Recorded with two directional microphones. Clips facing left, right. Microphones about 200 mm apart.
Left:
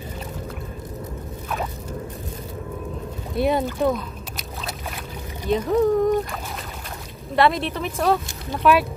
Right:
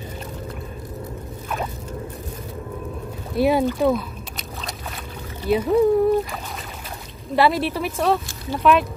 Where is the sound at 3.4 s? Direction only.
5° right (ahead or behind).